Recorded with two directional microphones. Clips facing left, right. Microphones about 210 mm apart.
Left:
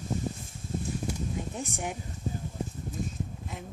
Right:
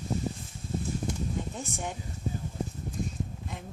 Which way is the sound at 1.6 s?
15° left (ahead or behind).